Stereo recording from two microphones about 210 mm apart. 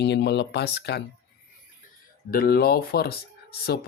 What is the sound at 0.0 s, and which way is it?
Speech, 55° left (ahead or behind).